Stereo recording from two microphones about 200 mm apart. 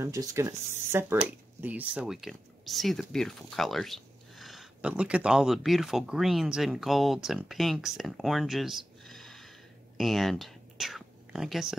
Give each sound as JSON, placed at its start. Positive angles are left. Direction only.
{"t": 0.0, "sound": "speech", "side_deg": -15}
{"t": 9.9, "sound": "whispering", "side_deg": 0}